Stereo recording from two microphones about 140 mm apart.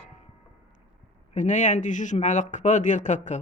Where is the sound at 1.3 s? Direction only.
60° left (ahead or behind).